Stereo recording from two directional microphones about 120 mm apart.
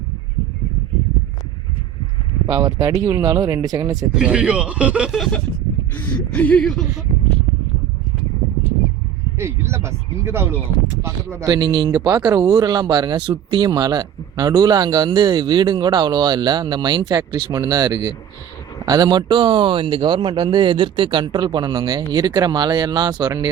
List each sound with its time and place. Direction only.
2.5 s speech: 30° right (ahead or behind)
4.1 s speech: 10° right (ahead or behind)
5.1 s a sound: centre (ahead or behind)
6.0 s speech: 15° left (ahead or behind)
9.4 s speech: 20° right (ahead or behind); by 23.3 s 40° right (ahead or behind)